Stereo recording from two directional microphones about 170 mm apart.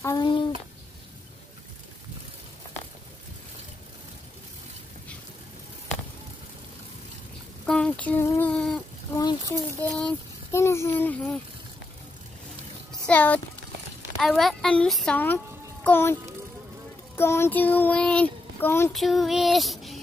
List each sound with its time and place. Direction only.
0.0 s a child's voice: 25° left (ahead or behind)
7.6 s a sound: 5° left (ahead or behind)
9.1 s a sound: 25° left (ahead or behind)
9.8 s speech: 5° left (ahead or behind)
13.0 s a child's voice: 10° left (ahead or behind)
18.9 s child singing: centre (ahead or behind)